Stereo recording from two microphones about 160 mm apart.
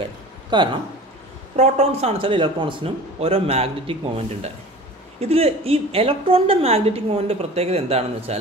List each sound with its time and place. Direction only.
0.5 s speech: 30° right (ahead or behind)
1.6 s a woman's voice: 40° right (ahead or behind)